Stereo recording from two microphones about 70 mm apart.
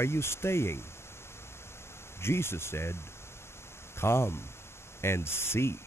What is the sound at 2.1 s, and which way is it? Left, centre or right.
Speech, left.